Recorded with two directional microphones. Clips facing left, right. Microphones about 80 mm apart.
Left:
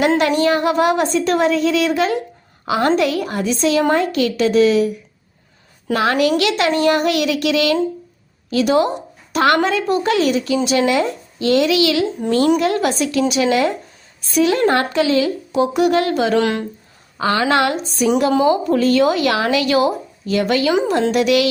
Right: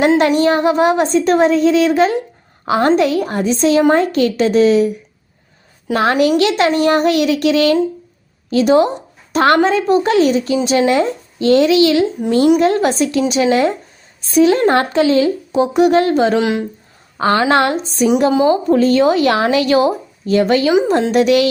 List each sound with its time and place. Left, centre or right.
0.3 s a woman's voice: right
5.9 s a woman's voice: right
16.4 s speech: centre
17.2 s a woman's voice: right